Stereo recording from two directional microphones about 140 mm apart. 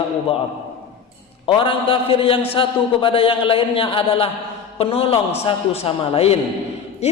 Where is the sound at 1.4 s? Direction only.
35° left (ahead or behind).